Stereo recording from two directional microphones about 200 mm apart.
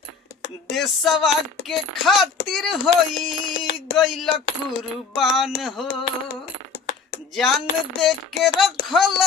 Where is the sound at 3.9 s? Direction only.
Centre (ahead or behind).